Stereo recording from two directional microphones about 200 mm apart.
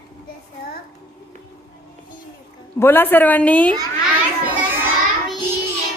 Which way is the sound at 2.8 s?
10° left (ahead or behind).